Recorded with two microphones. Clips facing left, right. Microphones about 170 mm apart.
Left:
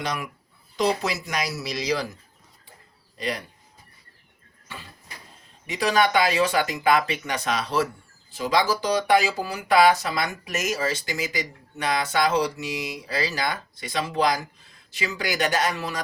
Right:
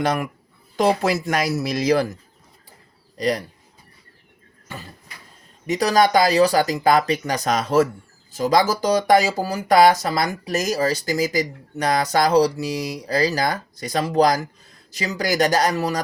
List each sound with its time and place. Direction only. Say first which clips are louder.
0.0 s speech: right 8 dB; 50° right (ahead or behind)
3.2 s speech: right 8 dB; 40° right (ahead or behind)
5.6 s speech: right 4 dB; 40° right (ahead or behind)